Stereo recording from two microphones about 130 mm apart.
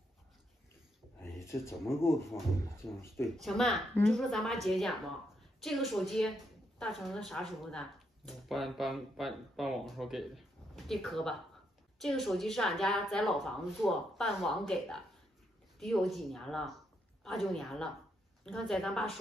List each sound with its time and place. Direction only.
1.2 s speech: 20° left (ahead or behind)
3.3 s speech: centre (ahead or behind)